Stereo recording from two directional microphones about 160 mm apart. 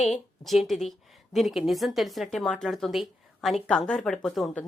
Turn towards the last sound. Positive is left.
turn(degrees=0)  # may be behind; listen again after turning